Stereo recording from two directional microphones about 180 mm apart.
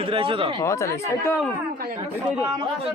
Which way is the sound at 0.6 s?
15° left (ahead or behind).